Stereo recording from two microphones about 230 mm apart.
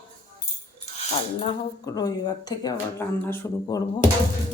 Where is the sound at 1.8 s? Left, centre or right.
Centre.